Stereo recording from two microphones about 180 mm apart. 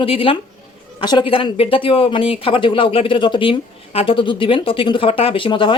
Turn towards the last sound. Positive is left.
turn(degrees=25)  # may be behind; listen again after turning